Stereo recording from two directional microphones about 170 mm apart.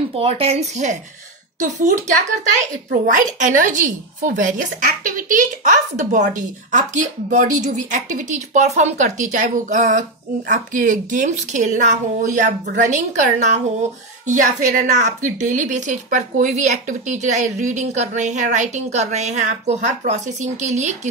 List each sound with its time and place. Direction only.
0.1 s speech: 35° right (ahead or behind)
2.9 s a woman's voice: 50° right (ahead or behind)